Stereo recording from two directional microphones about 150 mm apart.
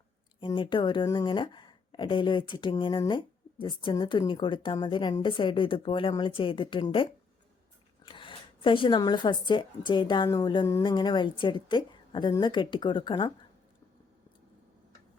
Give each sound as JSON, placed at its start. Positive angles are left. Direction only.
{"t": 0.3, "sound": "speech", "side_deg": 35}